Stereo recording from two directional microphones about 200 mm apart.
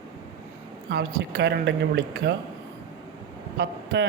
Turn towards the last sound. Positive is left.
turn(degrees=-65)  # may be behind; listen again after turning